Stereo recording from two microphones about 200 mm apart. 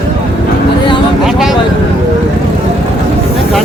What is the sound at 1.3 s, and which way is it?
Speech, centre (ahead or behind).